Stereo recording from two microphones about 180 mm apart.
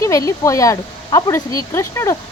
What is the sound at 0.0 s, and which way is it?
Speech, 20° left (ahead or behind).